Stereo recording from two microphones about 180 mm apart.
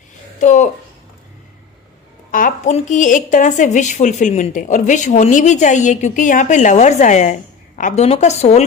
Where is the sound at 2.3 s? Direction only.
45° left (ahead or behind).